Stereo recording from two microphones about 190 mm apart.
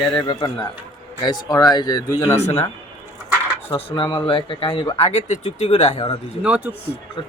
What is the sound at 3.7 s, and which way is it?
Speech, 25° left (ahead or behind).